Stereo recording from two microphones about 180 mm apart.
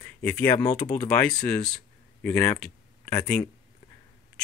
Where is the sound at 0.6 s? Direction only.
20° left (ahead or behind).